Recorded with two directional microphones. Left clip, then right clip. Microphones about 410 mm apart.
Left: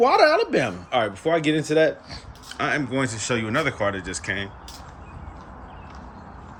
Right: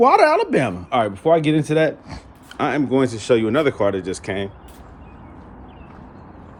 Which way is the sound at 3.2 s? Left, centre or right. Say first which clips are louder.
Right 7 dB; centre.